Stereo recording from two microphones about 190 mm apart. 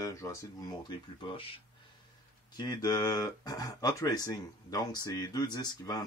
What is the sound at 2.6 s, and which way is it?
Speech, 20° left (ahead or behind).